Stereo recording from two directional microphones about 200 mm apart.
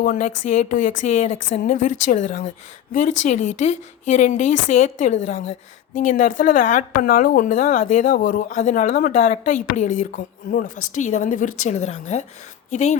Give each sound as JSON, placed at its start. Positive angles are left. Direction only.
{"t": 0.0, "sound": "a woman's voice", "side_deg": 40}